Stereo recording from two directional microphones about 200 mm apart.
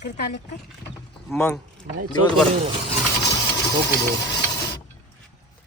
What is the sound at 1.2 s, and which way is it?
Speech, 5° left (ahead or behind).